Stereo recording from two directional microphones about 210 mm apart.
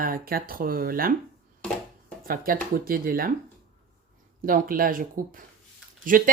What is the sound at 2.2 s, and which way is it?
Speech, 45° right (ahead or behind).